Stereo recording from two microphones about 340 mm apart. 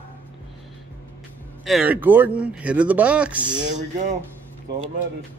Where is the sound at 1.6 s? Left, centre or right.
Centre.